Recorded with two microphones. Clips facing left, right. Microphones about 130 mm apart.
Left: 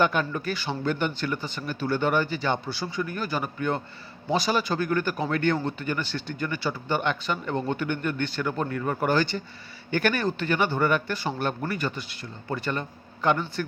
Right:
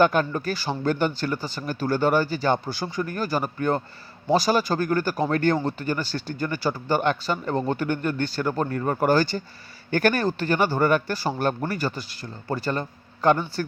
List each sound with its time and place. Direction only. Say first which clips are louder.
0.0 s a man's voice: right 4 dB; 40° right (ahead or behind)